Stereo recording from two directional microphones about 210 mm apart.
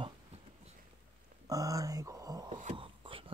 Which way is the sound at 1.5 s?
15° right (ahead or behind).